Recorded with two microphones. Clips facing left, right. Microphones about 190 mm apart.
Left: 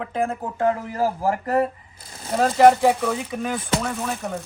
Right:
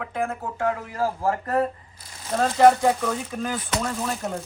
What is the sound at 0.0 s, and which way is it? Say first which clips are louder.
Speech: left 3 dB; 25° left (ahead or behind).